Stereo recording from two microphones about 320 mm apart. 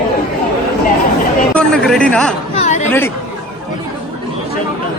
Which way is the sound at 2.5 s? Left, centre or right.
Left.